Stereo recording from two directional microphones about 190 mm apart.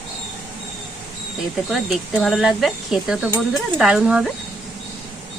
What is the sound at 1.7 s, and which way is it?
Speech, centre (ahead or behind).